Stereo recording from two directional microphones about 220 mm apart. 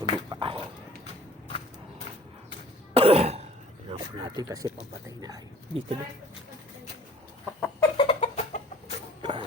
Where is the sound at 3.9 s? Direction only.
20° right (ahead or behind).